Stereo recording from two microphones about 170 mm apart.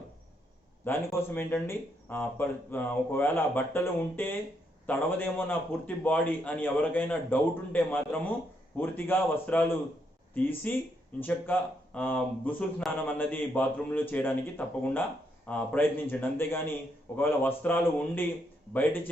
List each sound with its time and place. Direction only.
0.9 s speech: 15° left (ahead or behind)